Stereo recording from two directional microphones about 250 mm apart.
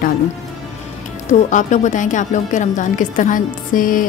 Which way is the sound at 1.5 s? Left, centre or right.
Left.